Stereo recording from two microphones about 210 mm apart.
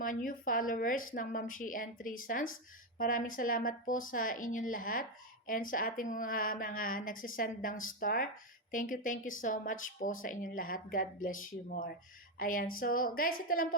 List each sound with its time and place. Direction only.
0.0 s a woman's voice: 40° left (ahead or behind)